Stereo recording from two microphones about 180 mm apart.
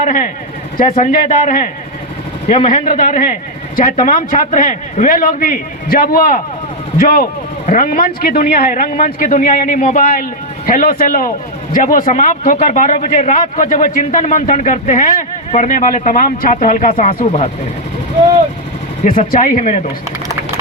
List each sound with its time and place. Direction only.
0.0 s a man's voice: 45° left (ahead or behind)
2.6 s a man's voice: 50° left (ahead or behind)
7.7 s a man's voice: 50° left (ahead or behind)
19.0 s a man's voice: 50° left (ahead or behind)